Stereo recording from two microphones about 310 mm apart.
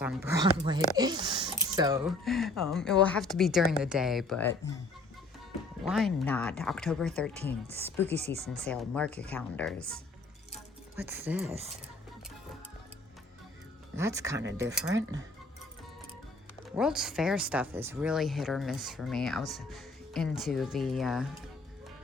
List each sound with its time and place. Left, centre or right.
0.0 s speech: centre
5.8 s speech: centre
8.1 s speech: right
8.6 s speech: centre
10.5 s music: centre
11.4 s speech: centre
13.9 s speech: centre
16.7 s speech: centre